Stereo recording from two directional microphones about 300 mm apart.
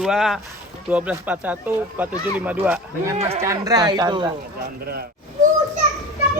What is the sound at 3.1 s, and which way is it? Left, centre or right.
Speech, centre.